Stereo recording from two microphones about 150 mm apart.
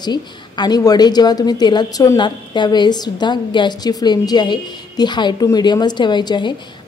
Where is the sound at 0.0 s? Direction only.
30° left (ahead or behind).